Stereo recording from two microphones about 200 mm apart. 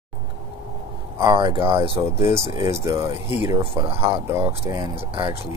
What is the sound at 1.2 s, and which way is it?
Speech, 25° right (ahead or behind).